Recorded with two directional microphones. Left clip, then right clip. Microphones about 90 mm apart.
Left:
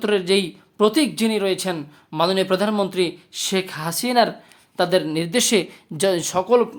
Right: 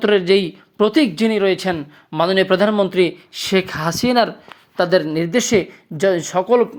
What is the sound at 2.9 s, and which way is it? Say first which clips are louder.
Speech: right 5 dB; 45° right (ahead or behind).